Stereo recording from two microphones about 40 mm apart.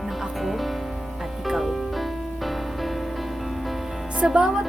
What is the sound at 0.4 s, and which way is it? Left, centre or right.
Music, centre.